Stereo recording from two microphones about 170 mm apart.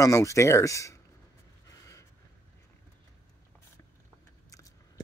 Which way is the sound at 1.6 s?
20° left (ahead or behind).